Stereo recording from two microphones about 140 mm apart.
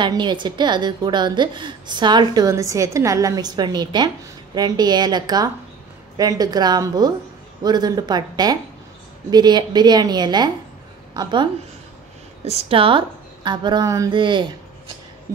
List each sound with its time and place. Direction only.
0.0 s a woman's voice: 35° right (ahead or behind)
12.4 s a woman's voice: 40° right (ahead or behind)